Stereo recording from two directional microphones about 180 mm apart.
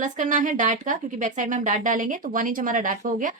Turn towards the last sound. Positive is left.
turn(degrees=-45)  # may be behind; listen again after turning